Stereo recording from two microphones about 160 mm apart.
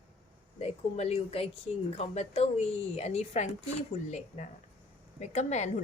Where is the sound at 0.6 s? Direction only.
40° left (ahead or behind).